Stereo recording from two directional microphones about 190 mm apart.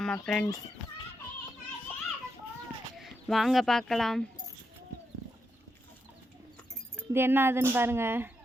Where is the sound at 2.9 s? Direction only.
Centre (ahead or behind).